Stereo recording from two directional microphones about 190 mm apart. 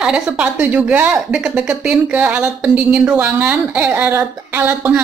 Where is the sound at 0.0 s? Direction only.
5° right (ahead or behind).